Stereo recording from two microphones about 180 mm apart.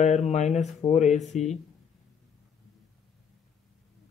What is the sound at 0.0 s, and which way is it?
Speech, 40° left (ahead or behind).